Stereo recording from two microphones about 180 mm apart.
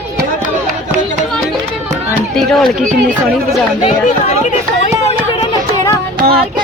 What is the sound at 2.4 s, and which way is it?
Run, centre (ahead or behind).